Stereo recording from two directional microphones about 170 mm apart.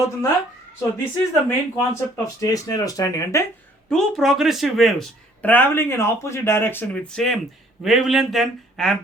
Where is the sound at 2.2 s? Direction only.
20° left (ahead or behind).